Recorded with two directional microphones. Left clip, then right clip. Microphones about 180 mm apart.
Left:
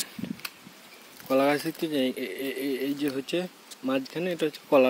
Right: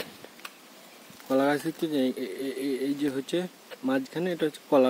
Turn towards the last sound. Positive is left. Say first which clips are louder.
# left 1 dB
turn(degrees=-5)  # may be behind; listen again after turning